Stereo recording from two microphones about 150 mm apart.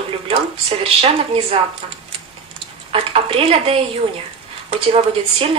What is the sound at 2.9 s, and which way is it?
A woman's voice, 35° right (ahead or behind).